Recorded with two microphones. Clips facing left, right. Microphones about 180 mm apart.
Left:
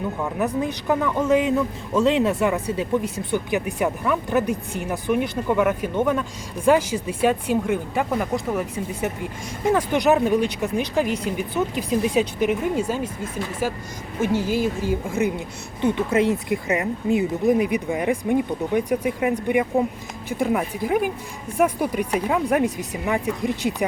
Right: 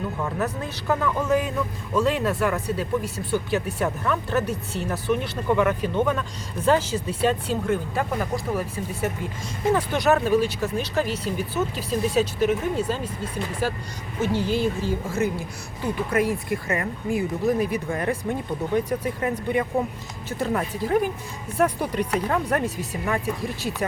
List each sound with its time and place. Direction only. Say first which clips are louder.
0.3 s a man's voice: left 4 dB; 15° left (ahead or behind)